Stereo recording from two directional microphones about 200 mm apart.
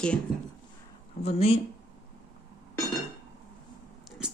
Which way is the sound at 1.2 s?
30° left (ahead or behind).